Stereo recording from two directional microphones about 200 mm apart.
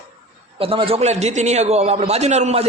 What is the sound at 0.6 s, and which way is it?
A man's voice, 25° right (ahead or behind).